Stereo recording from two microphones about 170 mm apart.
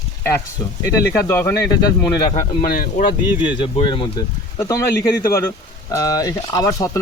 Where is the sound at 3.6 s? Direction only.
30° left (ahead or behind).